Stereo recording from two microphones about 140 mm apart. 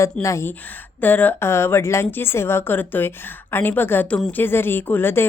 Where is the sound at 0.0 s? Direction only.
20° left (ahead or behind).